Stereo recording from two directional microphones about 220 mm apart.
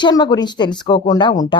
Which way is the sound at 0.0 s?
20° left (ahead or behind).